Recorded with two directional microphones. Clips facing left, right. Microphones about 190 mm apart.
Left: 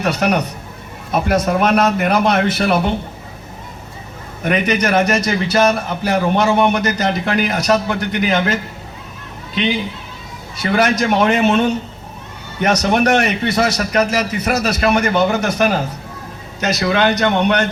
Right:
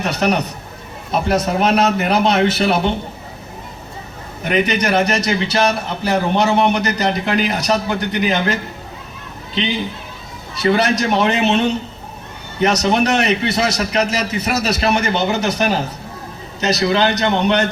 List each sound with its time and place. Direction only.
0.0 s a man's voice: 50° left (ahead or behind)
4.4 s a man's voice: 50° left (ahead or behind)
10.5 s a man's voice: 50° left (ahead or behind)
16.6 s a man's voice: 50° left (ahead or behind)